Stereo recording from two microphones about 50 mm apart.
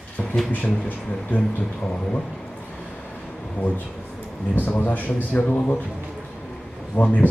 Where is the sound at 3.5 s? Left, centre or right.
Left.